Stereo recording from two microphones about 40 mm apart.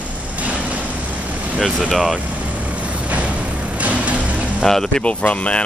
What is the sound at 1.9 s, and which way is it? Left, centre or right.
Speech, centre.